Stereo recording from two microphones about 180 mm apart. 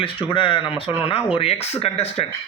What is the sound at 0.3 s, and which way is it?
A man's voice, 30° left (ahead or behind).